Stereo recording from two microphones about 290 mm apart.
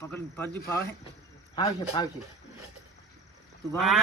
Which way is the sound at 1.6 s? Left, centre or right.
Centre.